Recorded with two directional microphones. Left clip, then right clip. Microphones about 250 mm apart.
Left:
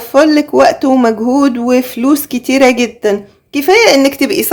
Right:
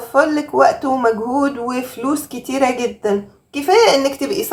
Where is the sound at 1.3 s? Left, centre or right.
Left.